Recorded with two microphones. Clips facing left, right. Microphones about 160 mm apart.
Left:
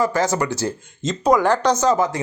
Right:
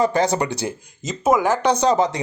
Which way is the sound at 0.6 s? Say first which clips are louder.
Left 2 dB; 15° right (ahead or behind).